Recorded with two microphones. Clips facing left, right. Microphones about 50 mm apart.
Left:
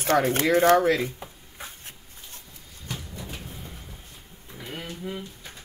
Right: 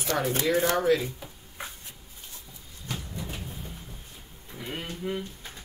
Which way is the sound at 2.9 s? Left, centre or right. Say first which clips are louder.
Right 1 dB; centre.